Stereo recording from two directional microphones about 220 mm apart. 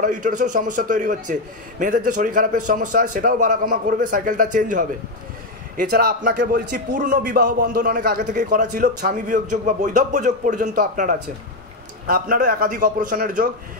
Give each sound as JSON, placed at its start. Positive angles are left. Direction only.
{"t": 0.0, "sound": "a man's voice", "side_deg": -35}